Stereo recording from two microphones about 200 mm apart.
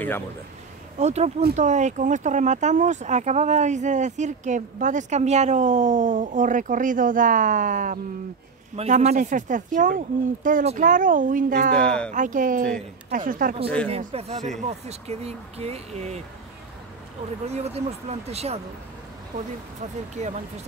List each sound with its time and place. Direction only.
0.9 s speech: 35° right (ahead or behind)
11.7 s speech: 5° left (ahead or behind)
12.1 s speech: 40° right (ahead or behind)
13.8 s speech: 30° right (ahead or behind)
17.5 s speech: 30° right (ahead or behind)
20.2 s speech: 35° right (ahead or behind)